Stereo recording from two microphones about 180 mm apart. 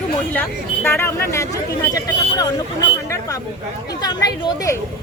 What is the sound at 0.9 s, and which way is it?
Speech, 15° left (ahead or behind).